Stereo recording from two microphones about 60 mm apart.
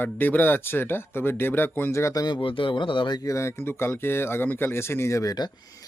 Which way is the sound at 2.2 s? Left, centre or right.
Left.